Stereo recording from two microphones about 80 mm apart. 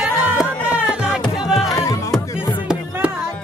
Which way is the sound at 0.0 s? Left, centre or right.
Right.